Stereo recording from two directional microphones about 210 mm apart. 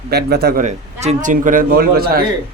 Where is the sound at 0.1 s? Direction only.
50° right (ahead or behind).